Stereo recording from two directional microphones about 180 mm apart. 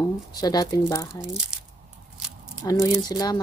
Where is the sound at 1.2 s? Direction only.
5° right (ahead or behind).